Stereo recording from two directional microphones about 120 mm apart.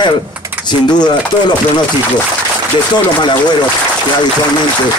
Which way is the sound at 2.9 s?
40° left (ahead or behind).